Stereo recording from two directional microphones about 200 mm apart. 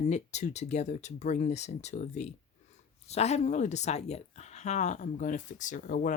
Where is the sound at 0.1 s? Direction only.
35° left (ahead or behind).